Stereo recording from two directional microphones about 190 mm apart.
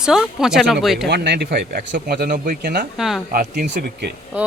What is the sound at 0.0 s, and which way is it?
Speech, centre (ahead or behind).